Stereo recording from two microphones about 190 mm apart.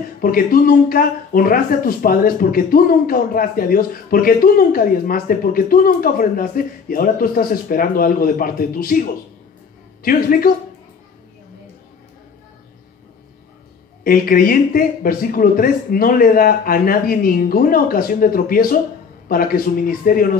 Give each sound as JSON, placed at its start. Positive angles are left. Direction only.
{"t": 0.2, "sound": "speech", "side_deg": 50}
{"t": 14.0, "sound": "speech", "side_deg": 50}